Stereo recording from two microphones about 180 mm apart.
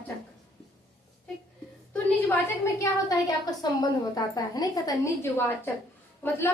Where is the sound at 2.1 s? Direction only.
15° left (ahead or behind).